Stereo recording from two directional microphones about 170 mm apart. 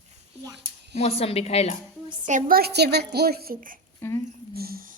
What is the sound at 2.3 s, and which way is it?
A woman's voice, 50° right (ahead or behind).